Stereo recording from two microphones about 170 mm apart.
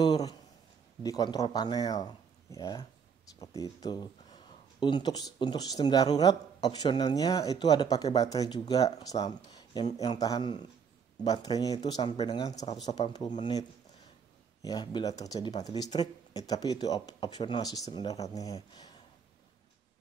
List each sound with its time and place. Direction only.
0.0 s a sound: 25° left (ahead or behind)
1.0 s speech: 20° left (ahead or behind)
14.6 s speech: 25° left (ahead or behind)